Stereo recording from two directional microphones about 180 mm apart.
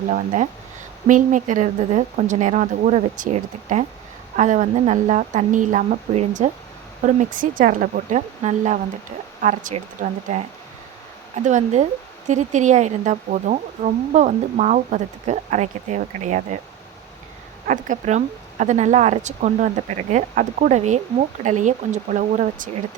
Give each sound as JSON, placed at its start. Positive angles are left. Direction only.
{"t": 0.1, "sound": "a woman's voice", "side_deg": -45}
{"t": 11.4, "sound": "speech", "side_deg": -40}
{"t": 17.7, "sound": "a woman's voice", "side_deg": -45}